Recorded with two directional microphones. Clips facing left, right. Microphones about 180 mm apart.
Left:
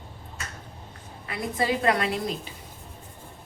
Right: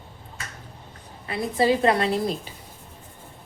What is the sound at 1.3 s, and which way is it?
Speech, 30° right (ahead or behind).